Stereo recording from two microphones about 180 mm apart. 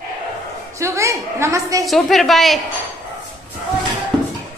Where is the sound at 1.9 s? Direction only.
Centre (ahead or behind).